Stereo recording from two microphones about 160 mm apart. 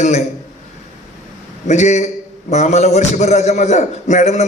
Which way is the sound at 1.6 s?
45° left (ahead or behind).